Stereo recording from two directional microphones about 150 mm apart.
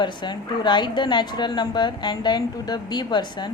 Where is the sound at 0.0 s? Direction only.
30° left (ahead or behind).